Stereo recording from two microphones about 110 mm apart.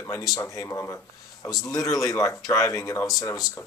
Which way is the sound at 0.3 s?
30° left (ahead or behind).